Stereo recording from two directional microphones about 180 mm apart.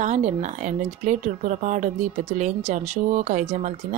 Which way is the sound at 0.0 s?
40° right (ahead or behind).